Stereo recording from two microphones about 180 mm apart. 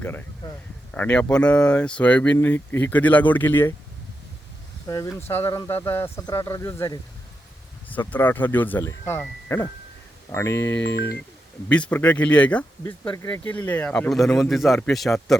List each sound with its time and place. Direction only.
0.0 s speech: 10° left (ahead or behind)
4.9 s speech: 15° left (ahead or behind); by 15.4 s centre (ahead or behind)